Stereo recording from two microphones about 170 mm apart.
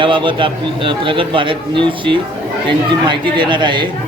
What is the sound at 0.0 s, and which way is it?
A man's voice, 30° right (ahead or behind).